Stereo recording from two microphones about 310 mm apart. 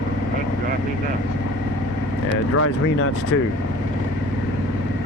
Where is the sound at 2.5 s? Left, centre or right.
Left.